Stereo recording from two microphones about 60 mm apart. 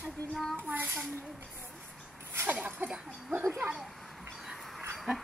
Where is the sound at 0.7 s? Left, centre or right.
Right.